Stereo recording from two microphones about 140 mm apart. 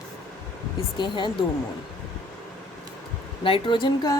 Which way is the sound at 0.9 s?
35° left (ahead or behind).